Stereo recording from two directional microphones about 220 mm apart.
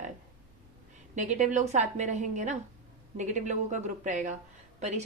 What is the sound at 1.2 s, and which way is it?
A woman's voice, 35° right (ahead or behind).